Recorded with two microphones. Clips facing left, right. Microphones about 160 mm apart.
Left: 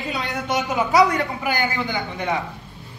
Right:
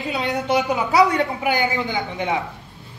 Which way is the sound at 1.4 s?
20° right (ahead or behind).